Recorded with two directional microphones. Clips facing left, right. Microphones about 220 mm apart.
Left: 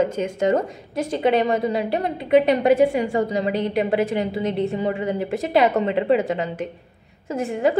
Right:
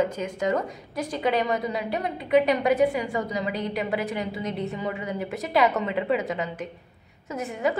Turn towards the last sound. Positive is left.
turn(degrees=30)  # may be behind; listen again after turning